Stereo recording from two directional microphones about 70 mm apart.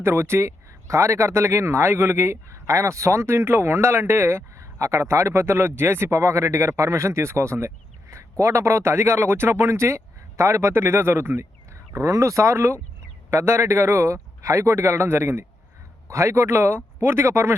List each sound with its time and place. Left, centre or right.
0.0 s speech: right